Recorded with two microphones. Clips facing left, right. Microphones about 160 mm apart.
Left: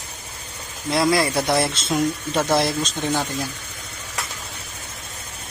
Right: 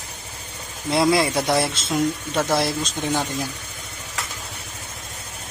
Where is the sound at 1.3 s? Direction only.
5° right (ahead or behind).